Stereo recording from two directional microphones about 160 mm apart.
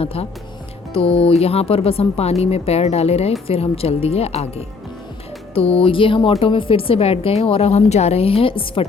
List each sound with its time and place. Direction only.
0.0 s a woman's voice: 35° left (ahead or behind)